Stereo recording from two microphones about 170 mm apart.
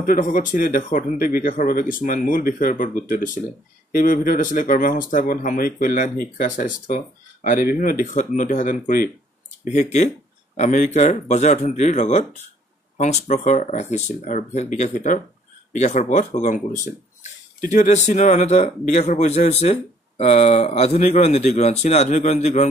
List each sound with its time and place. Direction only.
0.0 s speech: 55° left (ahead or behind)
9.7 s speech: 45° left (ahead or behind)